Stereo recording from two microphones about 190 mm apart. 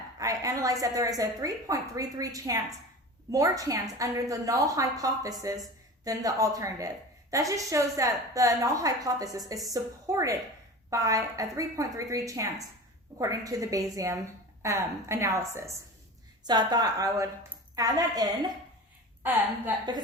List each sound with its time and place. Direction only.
0.2 s a woman's voice: 20° right (ahead or behind)